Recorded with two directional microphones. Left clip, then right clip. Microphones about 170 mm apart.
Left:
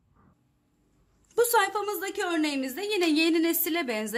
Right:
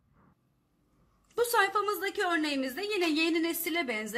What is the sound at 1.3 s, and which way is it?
Speech, 20° left (ahead or behind).